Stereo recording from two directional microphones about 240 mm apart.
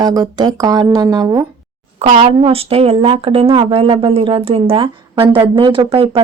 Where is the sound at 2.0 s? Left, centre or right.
Right.